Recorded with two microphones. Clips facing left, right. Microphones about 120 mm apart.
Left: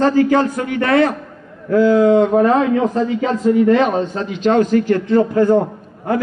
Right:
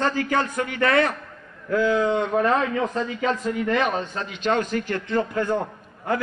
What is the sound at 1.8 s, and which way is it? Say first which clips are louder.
A man's voice: left 11 dB; 40° left (ahead or behind).